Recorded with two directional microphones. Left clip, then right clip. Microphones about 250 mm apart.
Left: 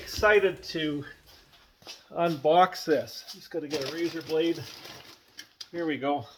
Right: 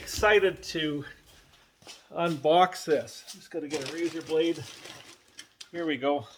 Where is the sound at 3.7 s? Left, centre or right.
Left.